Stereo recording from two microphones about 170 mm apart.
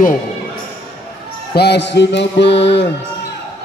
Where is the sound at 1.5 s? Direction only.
75° left (ahead or behind).